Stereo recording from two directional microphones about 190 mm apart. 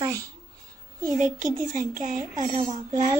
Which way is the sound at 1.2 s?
40° right (ahead or behind).